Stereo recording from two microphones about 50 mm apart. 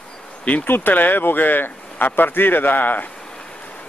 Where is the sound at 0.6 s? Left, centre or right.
Left.